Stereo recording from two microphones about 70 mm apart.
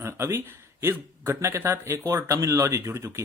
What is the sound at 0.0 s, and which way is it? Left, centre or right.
Speech, right.